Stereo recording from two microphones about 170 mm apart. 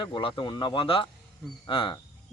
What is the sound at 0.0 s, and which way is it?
Speech, 30° left (ahead or behind).